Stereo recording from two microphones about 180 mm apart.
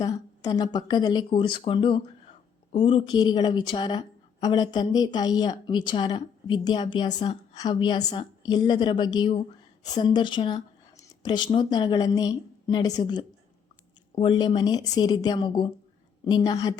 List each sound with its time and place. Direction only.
0.0 s a woman's voice: 20° left (ahead or behind)